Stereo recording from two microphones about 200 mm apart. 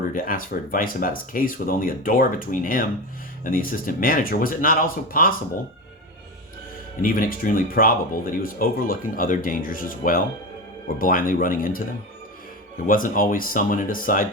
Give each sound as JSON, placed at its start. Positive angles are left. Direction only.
{"t": 0.1, "sound": "speech", "side_deg": 45}
{"t": 7.0, "sound": "speech", "side_deg": 45}
{"t": 12.8, "sound": "speech", "side_deg": 45}